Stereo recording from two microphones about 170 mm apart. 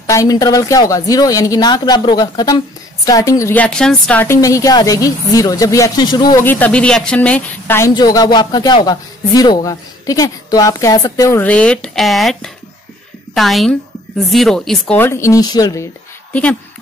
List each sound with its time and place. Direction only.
0.0 s speech: 20° left (ahead or behind)
6.4 s speech: 10° left (ahead or behind)